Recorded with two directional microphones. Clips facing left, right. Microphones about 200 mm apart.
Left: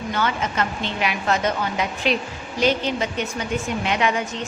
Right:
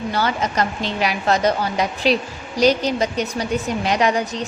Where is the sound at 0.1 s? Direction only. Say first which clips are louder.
Right 2 dB; 35° right (ahead or behind).